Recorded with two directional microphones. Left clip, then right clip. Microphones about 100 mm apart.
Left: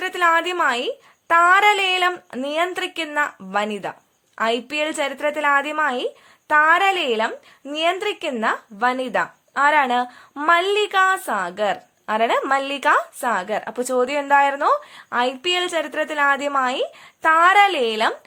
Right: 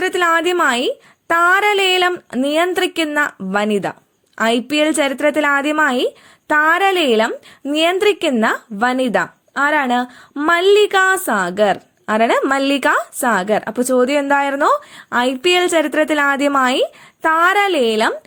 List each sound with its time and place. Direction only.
0.0 s a woman's voice: 35° right (ahead or behind)
9.6 s speech: 30° right (ahead or behind); by 16.9 s 45° right (ahead or behind)
17.2 s speech: 30° right (ahead or behind)